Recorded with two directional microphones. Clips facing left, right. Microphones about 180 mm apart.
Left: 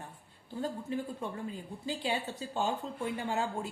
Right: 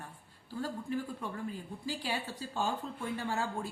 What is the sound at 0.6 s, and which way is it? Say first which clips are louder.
Speech: left 1 dB; 20° left (ahead or behind).